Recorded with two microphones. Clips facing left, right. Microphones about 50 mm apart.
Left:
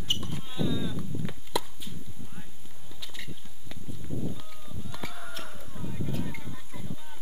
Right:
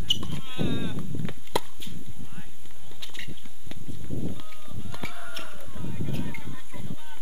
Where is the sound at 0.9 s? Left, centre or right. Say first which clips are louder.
Right 1 dB; centre.